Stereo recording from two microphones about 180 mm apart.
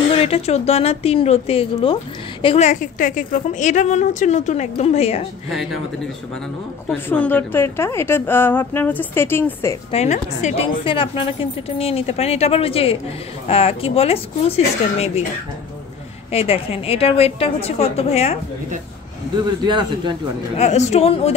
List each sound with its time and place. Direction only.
0.1 s a woman's voice: 35° left (ahead or behind)
5.5 s speech: centre (ahead or behind)
7.1 s a woman's voice: 10° left (ahead or behind)
9.8 s a woman's voice: 40° left (ahead or behind)
16.3 s a woman's voice: 30° left (ahead or behind)
19.4 s speech: 20° right (ahead or behind)
20.5 s a woman's voice: 40° left (ahead or behind)